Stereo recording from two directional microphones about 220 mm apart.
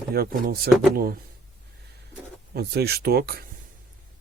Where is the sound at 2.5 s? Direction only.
45° right (ahead or behind).